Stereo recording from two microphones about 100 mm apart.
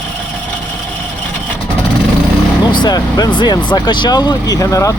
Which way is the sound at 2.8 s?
45° left (ahead or behind).